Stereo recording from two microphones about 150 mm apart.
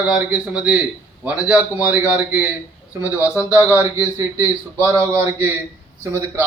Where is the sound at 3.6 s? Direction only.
20° right (ahead or behind).